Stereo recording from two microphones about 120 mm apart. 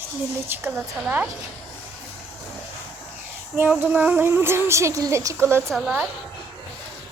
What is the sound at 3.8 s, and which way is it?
Speech, 15° right (ahead or behind).